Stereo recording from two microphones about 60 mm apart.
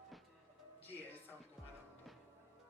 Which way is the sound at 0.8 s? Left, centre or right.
Left.